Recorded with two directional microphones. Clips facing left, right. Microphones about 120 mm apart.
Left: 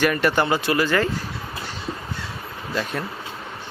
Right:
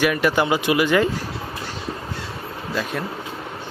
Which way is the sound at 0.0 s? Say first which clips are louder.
Right 1 dB; 5° right (ahead or behind).